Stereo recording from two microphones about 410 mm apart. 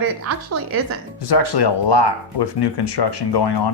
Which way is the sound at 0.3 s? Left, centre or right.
Right.